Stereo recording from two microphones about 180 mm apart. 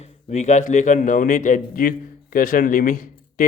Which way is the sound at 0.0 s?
40° left (ahead or behind).